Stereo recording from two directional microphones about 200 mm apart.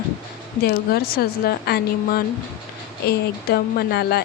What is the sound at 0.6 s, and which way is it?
Speech, 50° left (ahead or behind).